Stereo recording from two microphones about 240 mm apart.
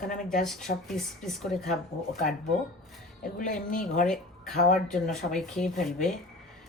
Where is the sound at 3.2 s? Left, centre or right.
Left.